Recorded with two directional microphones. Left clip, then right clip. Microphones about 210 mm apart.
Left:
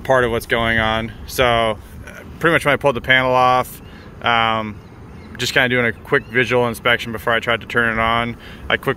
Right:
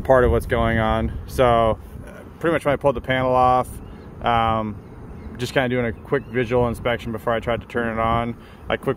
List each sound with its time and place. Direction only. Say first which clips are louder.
0.0 s speech: even; 15° right (ahead or behind)